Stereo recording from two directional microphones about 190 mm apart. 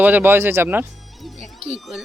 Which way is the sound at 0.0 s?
10° right (ahead or behind).